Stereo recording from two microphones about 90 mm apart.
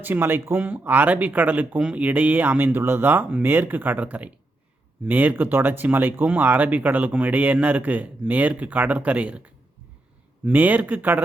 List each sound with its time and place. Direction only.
0.0 s speech: 20° right (ahead or behind)